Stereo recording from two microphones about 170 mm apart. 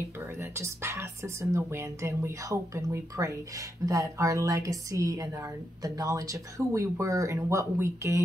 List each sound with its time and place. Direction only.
0.4 s speech: 15° right (ahead or behind)